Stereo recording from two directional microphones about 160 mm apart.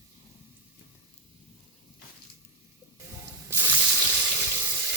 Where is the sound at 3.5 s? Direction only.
15° right (ahead or behind).